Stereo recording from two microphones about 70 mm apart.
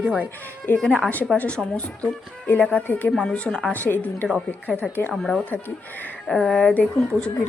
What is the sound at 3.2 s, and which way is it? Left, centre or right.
Speech, centre.